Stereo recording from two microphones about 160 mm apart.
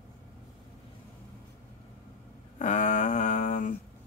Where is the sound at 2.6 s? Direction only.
50° left (ahead or behind).